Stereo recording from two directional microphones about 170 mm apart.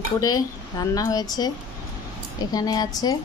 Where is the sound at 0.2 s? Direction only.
20° left (ahead or behind).